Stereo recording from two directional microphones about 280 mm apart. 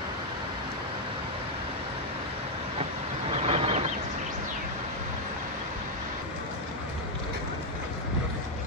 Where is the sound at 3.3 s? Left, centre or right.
Right.